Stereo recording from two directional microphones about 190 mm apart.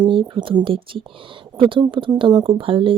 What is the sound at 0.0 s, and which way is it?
Speech, 25° right (ahead or behind).